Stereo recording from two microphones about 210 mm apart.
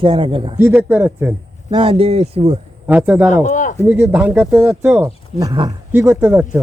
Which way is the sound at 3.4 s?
35° left (ahead or behind).